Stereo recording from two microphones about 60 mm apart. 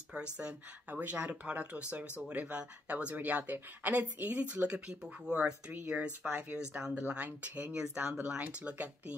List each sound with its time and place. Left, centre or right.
0.1 s speech: centre